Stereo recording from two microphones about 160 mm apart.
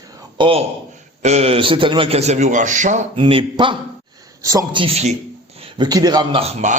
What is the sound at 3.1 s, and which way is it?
Speech, 35° right (ahead or behind).